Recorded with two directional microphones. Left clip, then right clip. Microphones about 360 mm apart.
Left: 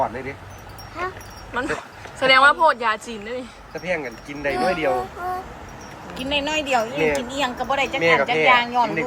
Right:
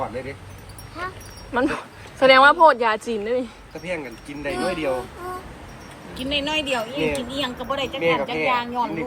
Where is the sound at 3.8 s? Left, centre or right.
Left.